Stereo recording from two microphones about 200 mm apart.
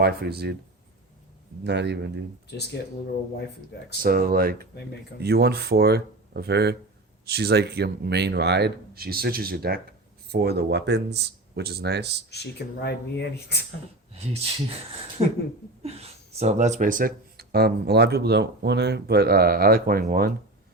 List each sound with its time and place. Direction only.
0.0 s speech: 50° right (ahead or behind)
1.6 s speech: 60° right (ahead or behind)
4.0 s speech: 45° right (ahead or behind)
12.3 s speech: 55° left (ahead or behind)
14.1 s speech: 30° right (ahead or behind); by 20.3 s 45° right (ahead or behind)